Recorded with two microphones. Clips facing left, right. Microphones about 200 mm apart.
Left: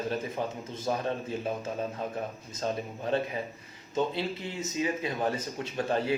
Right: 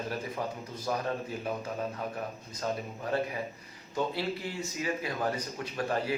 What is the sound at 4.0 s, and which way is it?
Speech, 20° left (ahead or behind).